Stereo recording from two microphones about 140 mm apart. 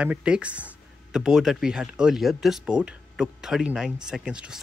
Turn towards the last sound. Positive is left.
turn(degrees=-5)  # may be behind; listen again after turning